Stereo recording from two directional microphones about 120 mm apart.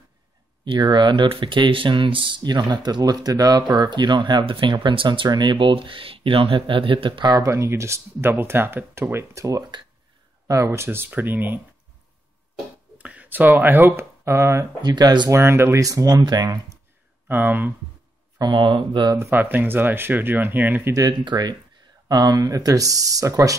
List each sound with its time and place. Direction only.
0.7 s speech: 40° right (ahead or behind); by 11.6 s 15° right (ahead or behind)
12.9 s speech: 10° right (ahead or behind)
14.8 s speech: 35° right (ahead or behind)
17.3 s speech: 15° right (ahead or behind)
18.4 s speech: 40° right (ahead or behind)
19.1 s speech: 20° right (ahead or behind)
21.2 s speech: 40° right (ahead or behind)